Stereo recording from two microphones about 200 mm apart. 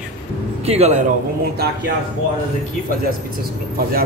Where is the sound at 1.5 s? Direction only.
50° right (ahead or behind).